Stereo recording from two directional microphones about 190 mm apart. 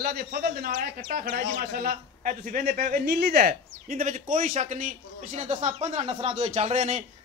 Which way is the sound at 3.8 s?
40° right (ahead or behind).